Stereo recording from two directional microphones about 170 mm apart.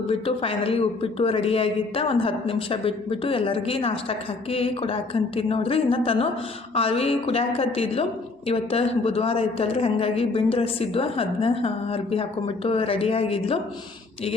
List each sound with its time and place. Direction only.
0.1 s a man's voice: 35° left (ahead or behind)